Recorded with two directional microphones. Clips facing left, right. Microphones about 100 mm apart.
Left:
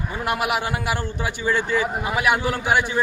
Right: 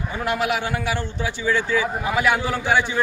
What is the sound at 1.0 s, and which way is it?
Speech, 50° left (ahead or behind).